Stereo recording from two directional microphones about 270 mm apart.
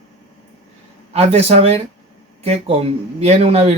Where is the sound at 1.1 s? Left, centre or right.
Right.